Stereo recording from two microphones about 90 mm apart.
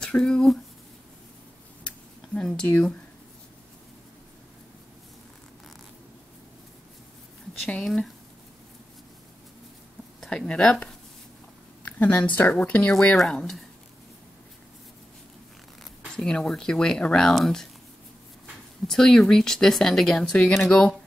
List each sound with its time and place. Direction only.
0.0 s speech: 10° left (ahead or behind)
1.9 s a sound: 10° left (ahead or behind)
7.6 s speech: 5° left (ahead or behind)
10.3 s speech: 10° left (ahead or behind)
12.9 s speech: centre (ahead or behind)
16.2 s speech: 5° left (ahead or behind)
18.9 s speech: 5° left (ahead or behind)